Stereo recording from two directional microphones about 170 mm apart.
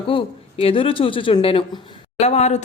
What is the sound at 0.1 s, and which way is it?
Speech, 35° left (ahead or behind).